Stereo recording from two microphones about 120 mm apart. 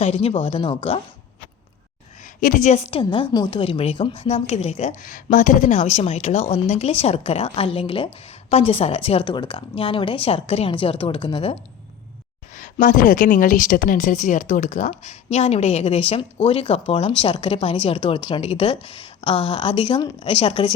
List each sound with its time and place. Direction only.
0.0 s a woman's voice: 55° left (ahead or behind)
2.2 s a woman's voice: 90° left; by 3.0 s 65° left (ahead or behind)
3.0 s a woman's voice: 45° left (ahead or behind)
12.5 s a woman's voice: 90° left; by 20.7 s 45° left (ahead or behind)